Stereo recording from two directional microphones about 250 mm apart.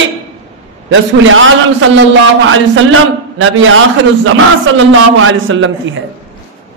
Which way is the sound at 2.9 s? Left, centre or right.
Right.